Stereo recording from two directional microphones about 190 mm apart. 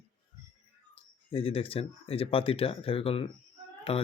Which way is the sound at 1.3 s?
30° left (ahead or behind).